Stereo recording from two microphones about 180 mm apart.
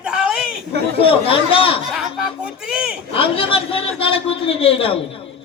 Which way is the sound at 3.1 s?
30° left (ahead or behind).